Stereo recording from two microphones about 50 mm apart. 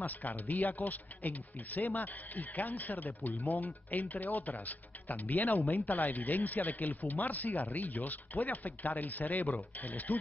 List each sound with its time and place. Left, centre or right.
0.0 s speech: left